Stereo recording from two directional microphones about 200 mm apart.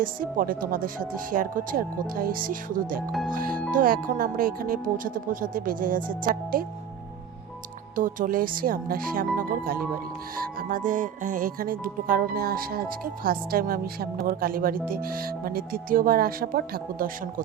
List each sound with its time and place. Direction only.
0.0 s speech: 45° right (ahead or behind)
7.9 s speech: 40° right (ahead or behind)